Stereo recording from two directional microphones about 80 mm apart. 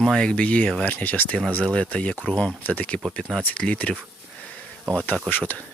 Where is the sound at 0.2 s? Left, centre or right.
Centre.